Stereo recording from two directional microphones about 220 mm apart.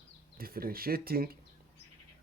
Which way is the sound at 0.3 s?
40° right (ahead or behind).